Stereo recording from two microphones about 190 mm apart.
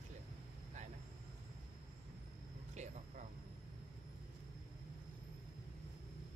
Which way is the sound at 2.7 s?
40° right (ahead or behind).